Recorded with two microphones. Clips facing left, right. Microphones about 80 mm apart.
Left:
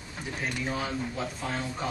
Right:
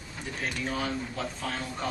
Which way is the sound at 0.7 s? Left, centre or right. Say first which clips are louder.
Even; centre.